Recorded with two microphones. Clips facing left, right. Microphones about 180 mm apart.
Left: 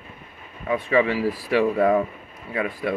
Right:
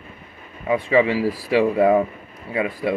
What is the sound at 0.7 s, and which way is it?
Speech, 20° right (ahead or behind).